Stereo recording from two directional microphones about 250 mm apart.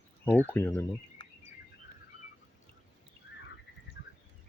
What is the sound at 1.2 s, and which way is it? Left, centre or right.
Bird, centre.